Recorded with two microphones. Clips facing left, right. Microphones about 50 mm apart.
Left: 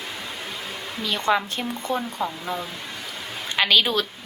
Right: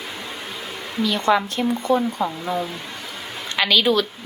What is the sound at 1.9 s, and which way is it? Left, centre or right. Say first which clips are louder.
Speech: right 4 dB; centre.